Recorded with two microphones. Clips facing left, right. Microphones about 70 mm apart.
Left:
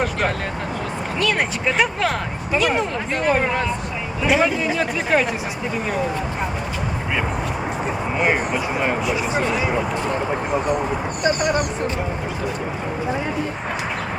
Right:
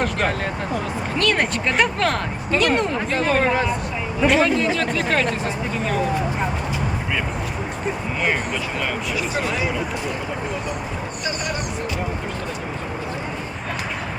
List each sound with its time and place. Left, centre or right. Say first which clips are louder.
0.0 s speech: even; centre
4.3 s a man's voice: even; centre
8.2 s speech: left 3 dB; centre